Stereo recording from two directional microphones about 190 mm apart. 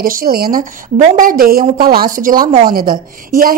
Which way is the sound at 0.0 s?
50° right (ahead or behind).